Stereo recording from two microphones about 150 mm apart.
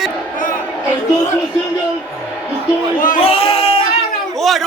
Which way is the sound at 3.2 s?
40° left (ahead or behind).